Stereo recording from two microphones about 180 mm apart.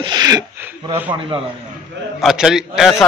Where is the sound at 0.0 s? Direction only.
20° right (ahead or behind).